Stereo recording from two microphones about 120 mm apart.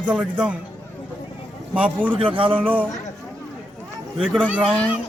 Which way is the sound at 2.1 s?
45° right (ahead or behind).